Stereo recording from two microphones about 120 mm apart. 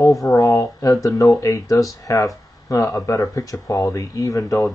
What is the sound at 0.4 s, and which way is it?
Speech, 25° left (ahead or behind).